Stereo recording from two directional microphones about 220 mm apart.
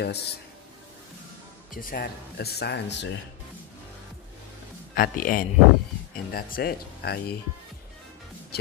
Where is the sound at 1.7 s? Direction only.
40° left (ahead or behind).